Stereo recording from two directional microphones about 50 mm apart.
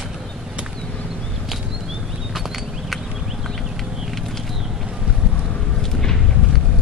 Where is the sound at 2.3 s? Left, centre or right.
Centre.